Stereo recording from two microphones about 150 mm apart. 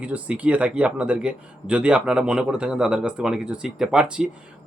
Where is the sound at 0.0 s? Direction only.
10° right (ahead or behind).